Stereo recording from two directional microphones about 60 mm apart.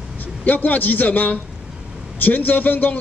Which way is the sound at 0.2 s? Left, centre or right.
Left.